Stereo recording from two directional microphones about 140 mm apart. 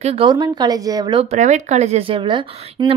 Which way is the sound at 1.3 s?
55° right (ahead or behind).